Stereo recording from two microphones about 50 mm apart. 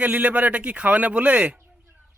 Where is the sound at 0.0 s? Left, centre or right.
Right.